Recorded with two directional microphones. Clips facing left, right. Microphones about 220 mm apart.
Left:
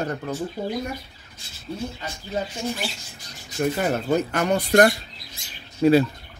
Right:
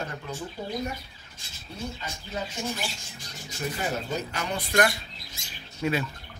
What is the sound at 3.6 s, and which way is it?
Speech, 55° left (ahead or behind).